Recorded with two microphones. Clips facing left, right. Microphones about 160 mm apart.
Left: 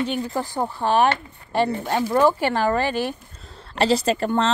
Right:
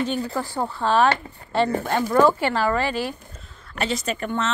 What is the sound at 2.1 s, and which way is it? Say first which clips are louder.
A woman's voice: right 1 dB; 15° left (ahead or behind).